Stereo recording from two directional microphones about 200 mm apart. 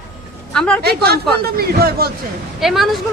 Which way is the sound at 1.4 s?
50° right (ahead or behind).